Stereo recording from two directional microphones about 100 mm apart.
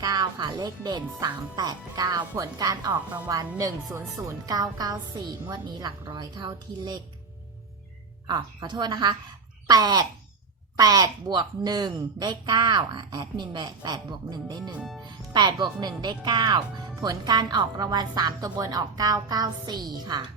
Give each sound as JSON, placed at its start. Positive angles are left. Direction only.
{"t": 0.0, "sound": "speech", "side_deg": -40}
{"t": 8.3, "sound": "speech", "side_deg": -45}